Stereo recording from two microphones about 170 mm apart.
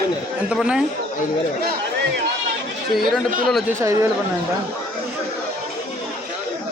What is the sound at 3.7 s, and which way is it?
Speech, 15° right (ahead or behind).